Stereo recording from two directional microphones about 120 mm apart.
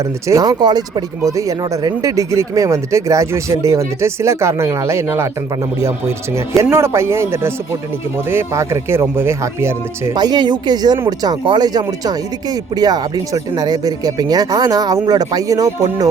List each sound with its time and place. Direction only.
0.0 s speech: 30° right (ahead or behind)
10.2 s speech: 35° right (ahead or behind)